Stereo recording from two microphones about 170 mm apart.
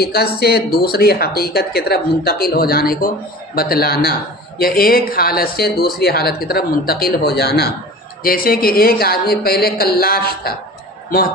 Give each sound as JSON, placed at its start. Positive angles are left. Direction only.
{"t": 0.0, "sound": "speech", "side_deg": 65}
{"t": 8.2, "sound": "speech", "side_deg": 60}